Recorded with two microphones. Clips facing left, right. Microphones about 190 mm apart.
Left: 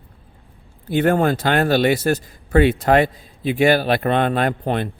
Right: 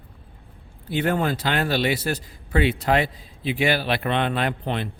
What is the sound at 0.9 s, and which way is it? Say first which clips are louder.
Speech: left 6 dB; 50° left (ahead or behind).